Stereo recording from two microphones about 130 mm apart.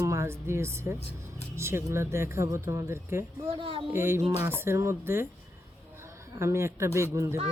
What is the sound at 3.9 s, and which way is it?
Speech, 20° right (ahead or behind).